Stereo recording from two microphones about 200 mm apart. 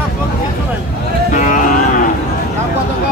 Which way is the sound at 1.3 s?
40° left (ahead or behind).